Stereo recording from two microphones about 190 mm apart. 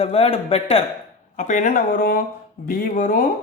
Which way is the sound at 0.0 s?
30° left (ahead or behind).